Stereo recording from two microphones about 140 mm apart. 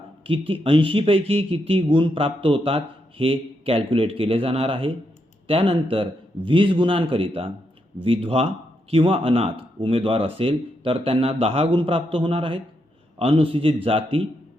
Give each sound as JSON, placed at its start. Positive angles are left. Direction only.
{"t": 0.3, "sound": "speech", "side_deg": -40}